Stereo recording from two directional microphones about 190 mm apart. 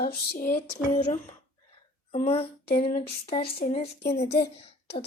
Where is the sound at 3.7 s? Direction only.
30° left (ahead or behind).